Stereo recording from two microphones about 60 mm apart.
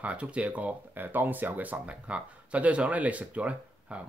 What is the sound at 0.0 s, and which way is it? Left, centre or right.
Speech, right.